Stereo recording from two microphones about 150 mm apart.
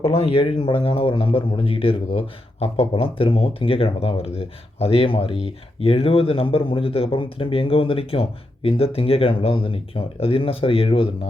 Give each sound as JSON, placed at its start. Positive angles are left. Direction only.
{"t": 0.0, "sound": "speech", "side_deg": 40}